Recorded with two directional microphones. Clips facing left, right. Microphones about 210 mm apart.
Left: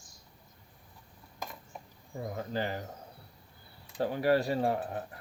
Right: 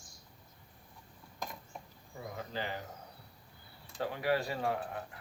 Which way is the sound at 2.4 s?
40° left (ahead or behind).